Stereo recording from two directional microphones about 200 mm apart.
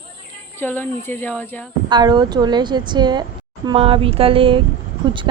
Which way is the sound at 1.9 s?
20° right (ahead or behind).